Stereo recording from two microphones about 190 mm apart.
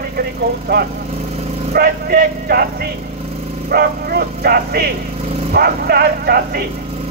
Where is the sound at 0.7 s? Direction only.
55° right (ahead or behind).